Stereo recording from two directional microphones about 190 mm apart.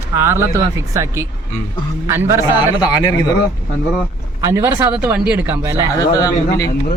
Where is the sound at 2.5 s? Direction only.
25° left (ahead or behind).